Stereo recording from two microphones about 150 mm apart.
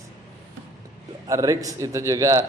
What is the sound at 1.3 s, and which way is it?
Speech, 20° right (ahead or behind).